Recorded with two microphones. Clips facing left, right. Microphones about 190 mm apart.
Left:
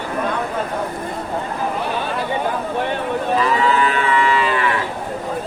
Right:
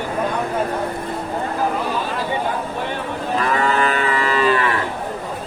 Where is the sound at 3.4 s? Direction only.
55° right (ahead or behind).